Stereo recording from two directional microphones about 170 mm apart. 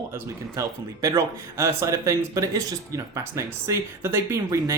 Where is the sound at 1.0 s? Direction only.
20° right (ahead or behind).